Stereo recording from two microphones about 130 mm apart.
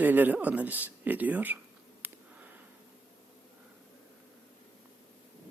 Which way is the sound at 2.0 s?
10° right (ahead or behind).